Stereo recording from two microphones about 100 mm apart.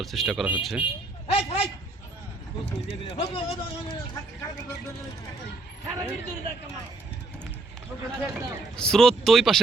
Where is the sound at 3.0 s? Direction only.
75° left (ahead or behind).